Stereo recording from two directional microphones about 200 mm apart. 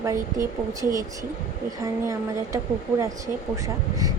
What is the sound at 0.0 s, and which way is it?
A woman's voice, 15° right (ahead or behind).